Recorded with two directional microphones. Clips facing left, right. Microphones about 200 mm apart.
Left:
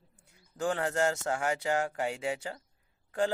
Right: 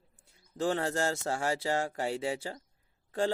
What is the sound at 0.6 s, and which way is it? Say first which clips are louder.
A man's voice: even; 25° right (ahead or behind).